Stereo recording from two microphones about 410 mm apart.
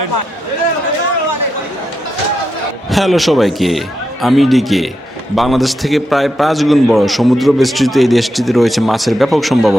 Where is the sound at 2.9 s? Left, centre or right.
Centre.